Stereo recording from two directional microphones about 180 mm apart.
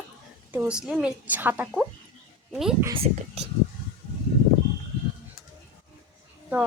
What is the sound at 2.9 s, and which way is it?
Speech, 35° right (ahead or behind).